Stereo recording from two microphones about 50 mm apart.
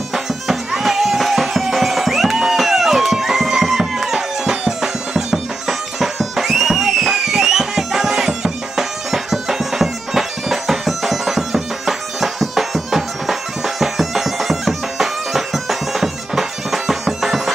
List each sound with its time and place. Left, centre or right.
0.1 s music: centre